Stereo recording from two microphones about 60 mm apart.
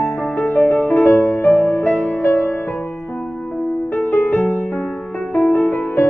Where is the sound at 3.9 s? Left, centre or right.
Left.